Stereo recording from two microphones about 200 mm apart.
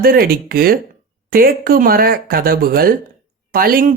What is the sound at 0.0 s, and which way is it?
Speech, 50° right (ahead or behind).